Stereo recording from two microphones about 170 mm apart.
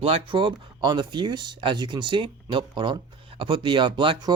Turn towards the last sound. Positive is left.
turn(degrees=-30)  # may be behind; listen again after turning